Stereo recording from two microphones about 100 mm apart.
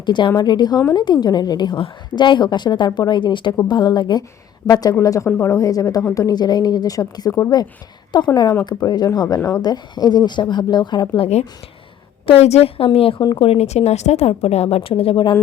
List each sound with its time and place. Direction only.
0.0 s a woman's voice: 50° left (ahead or behind); by 7.5 s 30° left (ahead or behind)
8.3 s speech: 45° left (ahead or behind)
11.2 s a woman's voice: 90° left; by 15.2 s 70° left (ahead or behind)